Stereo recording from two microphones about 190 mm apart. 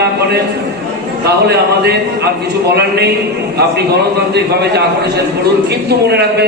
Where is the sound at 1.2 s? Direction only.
60° right (ahead or behind).